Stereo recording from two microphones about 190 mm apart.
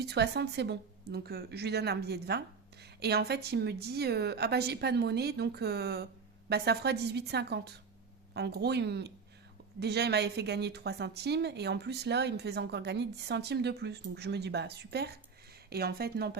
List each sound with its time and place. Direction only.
0.0 s speech: 60° right (ahead or behind)